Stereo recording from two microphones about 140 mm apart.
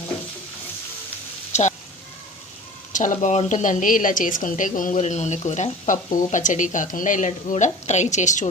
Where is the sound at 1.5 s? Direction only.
55° left (ahead or behind).